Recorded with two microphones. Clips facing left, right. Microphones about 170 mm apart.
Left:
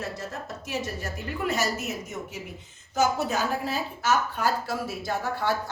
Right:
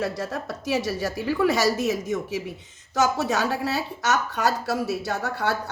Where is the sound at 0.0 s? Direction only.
80° right.